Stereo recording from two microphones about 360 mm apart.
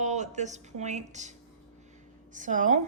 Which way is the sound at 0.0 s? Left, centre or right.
Centre.